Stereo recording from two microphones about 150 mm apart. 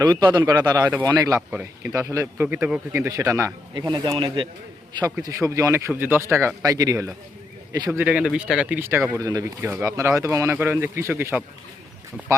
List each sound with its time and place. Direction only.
0.0 s speech: 25° right (ahead or behind)
1.4 s speech: 10° right (ahead or behind)
2.0 s speech: 20° right (ahead or behind); by 2.8 s 5° right (ahead or behind)
2.9 s speech: 20° right (ahead or behind)
3.8 s speech: 30° right (ahead or behind)
5.2 s speech: 20° right (ahead or behind)
7.9 s speech: 10° right (ahead or behind)